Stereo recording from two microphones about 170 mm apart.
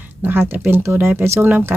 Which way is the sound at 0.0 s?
10° right (ahead or behind).